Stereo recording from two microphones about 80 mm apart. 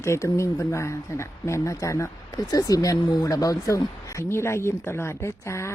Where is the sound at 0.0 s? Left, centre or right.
Left.